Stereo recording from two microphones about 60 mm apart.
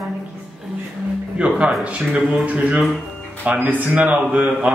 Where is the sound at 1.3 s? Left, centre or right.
Centre.